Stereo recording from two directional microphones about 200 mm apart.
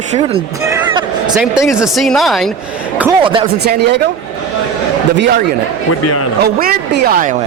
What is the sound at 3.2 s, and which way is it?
Speech, 25° right (ahead or behind).